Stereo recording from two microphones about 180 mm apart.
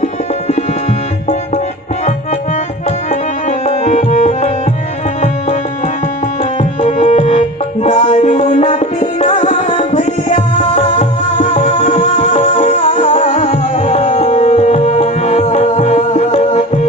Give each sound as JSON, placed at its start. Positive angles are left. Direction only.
{"t": 3.4, "sound": "tabla", "side_deg": 40}
{"t": 6.6, "sound": "tabla", "side_deg": 35}
{"t": 12.4, "sound": "music", "side_deg": 35}
{"t": 13.2, "sound": "tabla", "side_deg": 40}